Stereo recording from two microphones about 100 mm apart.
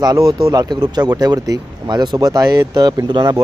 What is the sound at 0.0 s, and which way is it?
Speech, 40° right (ahead or behind).